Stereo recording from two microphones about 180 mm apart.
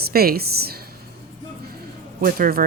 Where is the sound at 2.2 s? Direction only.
50° right (ahead or behind).